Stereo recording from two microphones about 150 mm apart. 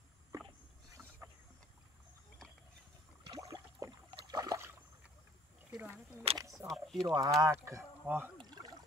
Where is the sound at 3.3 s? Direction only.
20° right (ahead or behind).